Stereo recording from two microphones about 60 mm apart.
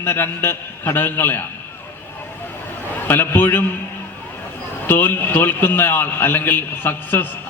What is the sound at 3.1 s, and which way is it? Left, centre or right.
Speech, left.